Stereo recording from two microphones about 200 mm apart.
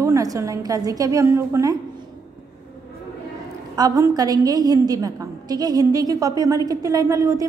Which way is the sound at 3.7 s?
15° right (ahead or behind).